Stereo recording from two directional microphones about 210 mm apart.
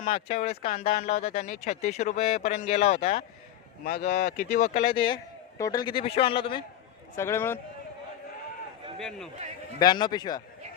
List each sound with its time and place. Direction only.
0.1 s speech: 30° left (ahead or behind)
3.8 s speech: 50° left (ahead or behind); by 6.3 s 25° left (ahead or behind)
7.2 s speech: 10° left (ahead or behind)
9.0 s a man's voice: centre (ahead or behind)
9.8 s speech: 20° left (ahead or behind)